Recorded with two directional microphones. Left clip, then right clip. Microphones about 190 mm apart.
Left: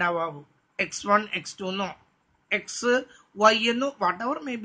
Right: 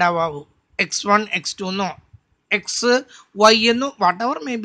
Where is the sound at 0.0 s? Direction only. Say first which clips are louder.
Right 8 dB; 50° right (ahead or behind).